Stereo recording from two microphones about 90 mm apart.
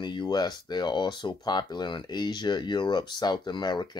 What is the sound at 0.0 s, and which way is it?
Speech, 55° left (ahead or behind).